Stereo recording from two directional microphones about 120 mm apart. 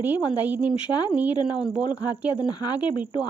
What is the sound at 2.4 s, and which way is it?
Speech, 35° left (ahead or behind).